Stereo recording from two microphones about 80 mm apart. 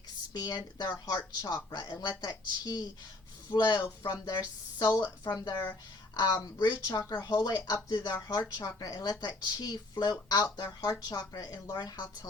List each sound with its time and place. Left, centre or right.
0.3 s a woman's voice: left
3.5 s speech: left
4.3 s a woman's voice: left
6.1 s a woman's voice: left
7.1 s speech: left
7.9 s a woman's voice: left
8.1 s a woman's voice: left